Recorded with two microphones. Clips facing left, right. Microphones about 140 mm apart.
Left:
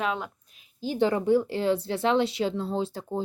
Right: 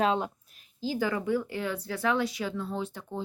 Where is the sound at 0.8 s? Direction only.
25° left (ahead or behind).